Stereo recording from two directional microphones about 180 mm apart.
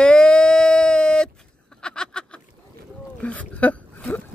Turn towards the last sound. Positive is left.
turn(degrees=10)  # may be behind; listen again after turning